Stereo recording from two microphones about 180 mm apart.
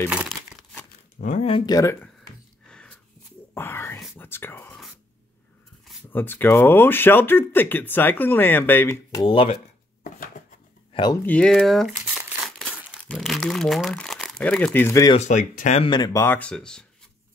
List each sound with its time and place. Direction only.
1.2 s speech: 45° left (ahead or behind)
1.5 s speech: 20° left (ahead or behind)
2.7 s a sound: 5° left (ahead or behind)
3.5 s whispering: 15° left (ahead or behind)
6.1 s speech: 10° left (ahead or behind)
9.2 s speech: 30° left (ahead or behind)
10.0 s a sound: 50° left (ahead or behind)
10.9 s a sound: 25° left (ahead or behind)
11.2 s speech: 5° left (ahead or behind)
15.1 s speech: 45° left (ahead or behind)
15.8 s speech: 25° left (ahead or behind); by 16.8 s 5° left (ahead or behind)